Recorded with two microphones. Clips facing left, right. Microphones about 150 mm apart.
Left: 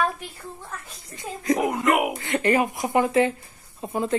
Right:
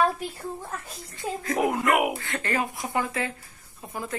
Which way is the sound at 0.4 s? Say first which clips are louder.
Right 4 dB; 15° right (ahead or behind).